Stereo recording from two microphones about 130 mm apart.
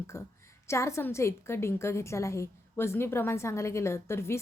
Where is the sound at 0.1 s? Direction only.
20° left (ahead or behind).